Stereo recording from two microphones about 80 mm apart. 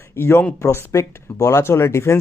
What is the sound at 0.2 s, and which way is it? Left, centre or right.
Speech, left.